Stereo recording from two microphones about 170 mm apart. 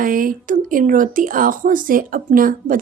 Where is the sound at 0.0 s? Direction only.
55° right (ahead or behind).